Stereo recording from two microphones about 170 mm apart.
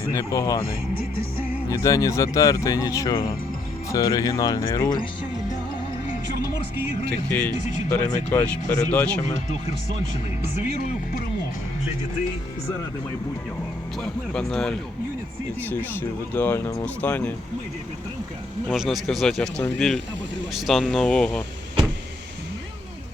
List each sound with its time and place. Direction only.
0.1 s speech: 20° left (ahead or behind)
1.7 s speech: 20° left (ahead or behind)
7.3 s speech: 10° left (ahead or behind)
14.0 s a man's voice: 5° left (ahead or behind)
18.7 s a man's voice: centre (ahead or behind)